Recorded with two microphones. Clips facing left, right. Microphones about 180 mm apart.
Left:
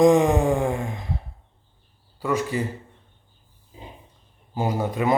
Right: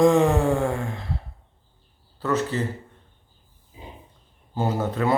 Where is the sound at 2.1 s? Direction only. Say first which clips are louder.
Even; 10° left (ahead or behind).